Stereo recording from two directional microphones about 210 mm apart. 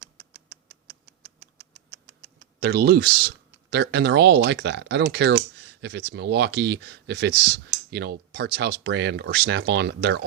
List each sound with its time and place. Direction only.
0.0 s rodents: 45° right (ahead or behind)
2.6 s speech: 50° right (ahead or behind)